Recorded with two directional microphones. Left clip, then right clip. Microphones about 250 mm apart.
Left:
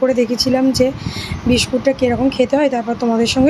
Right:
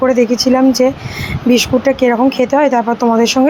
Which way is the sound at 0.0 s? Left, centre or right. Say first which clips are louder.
Right 4 dB; centre.